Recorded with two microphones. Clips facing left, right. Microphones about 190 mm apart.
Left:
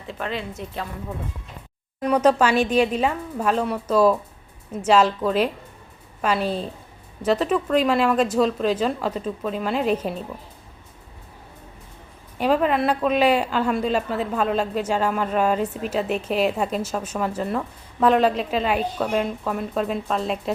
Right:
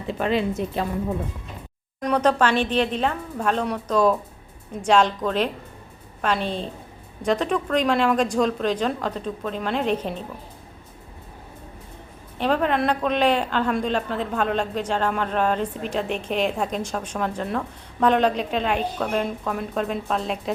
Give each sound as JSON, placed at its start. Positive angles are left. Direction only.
{"t": 0.1, "sound": "a woman's voice", "side_deg": -15}
{"t": 2.0, "sound": "a woman's voice", "side_deg": 5}
{"t": 12.4, "sound": "a woman's voice", "side_deg": 5}